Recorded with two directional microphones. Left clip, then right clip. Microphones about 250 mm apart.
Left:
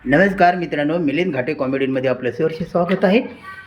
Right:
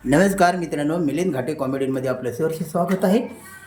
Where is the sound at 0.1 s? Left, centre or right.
Centre.